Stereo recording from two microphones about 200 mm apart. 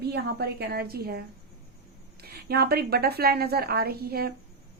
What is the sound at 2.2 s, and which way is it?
A woman's voice, 50° right (ahead or behind).